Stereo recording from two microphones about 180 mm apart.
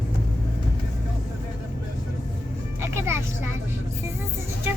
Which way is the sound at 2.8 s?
15° right (ahead or behind).